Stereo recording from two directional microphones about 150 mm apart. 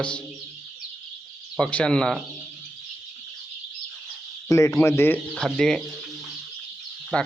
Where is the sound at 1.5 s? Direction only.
5° left (ahead or behind).